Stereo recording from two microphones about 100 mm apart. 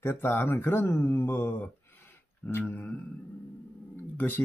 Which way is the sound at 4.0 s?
20° left (ahead or behind).